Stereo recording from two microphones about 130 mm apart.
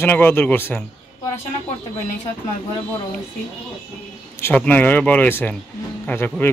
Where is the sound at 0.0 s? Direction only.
15° left (ahead or behind).